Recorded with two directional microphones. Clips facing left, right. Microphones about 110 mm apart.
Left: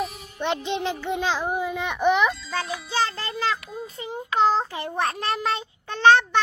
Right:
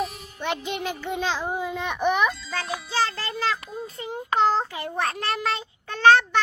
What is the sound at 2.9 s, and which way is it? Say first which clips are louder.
A child's voice: even; 20° left (ahead or behind).